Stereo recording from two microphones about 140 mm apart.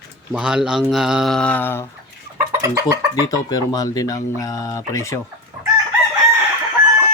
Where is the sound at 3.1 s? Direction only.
25° left (ahead or behind).